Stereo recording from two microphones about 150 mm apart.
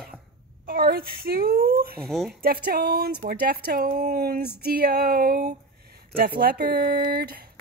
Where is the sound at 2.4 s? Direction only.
85° right.